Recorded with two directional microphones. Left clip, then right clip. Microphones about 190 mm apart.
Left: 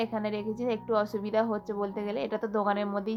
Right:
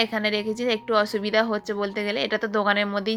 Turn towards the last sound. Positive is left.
turn(degrees=-10)  # may be behind; listen again after turning